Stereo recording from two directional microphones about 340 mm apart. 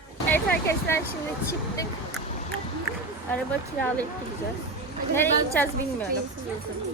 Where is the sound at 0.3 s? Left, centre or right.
Centre.